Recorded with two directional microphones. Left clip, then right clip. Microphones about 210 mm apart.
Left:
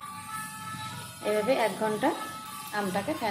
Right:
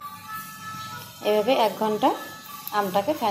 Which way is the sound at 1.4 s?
25° right (ahead or behind).